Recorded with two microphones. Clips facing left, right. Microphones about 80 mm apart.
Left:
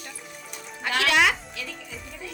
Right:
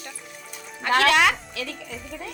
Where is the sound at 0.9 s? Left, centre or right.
Right.